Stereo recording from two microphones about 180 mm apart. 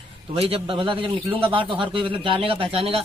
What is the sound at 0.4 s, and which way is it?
A man's voice, 30° right (ahead or behind).